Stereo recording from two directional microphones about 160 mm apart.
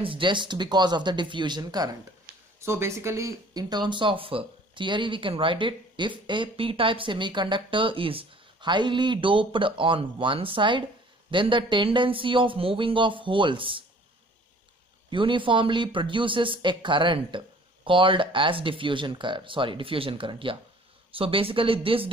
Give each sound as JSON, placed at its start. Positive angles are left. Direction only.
{"t": 0.0, "sound": "speech", "side_deg": -30}
{"t": 15.0, "sound": "speech", "side_deg": -30}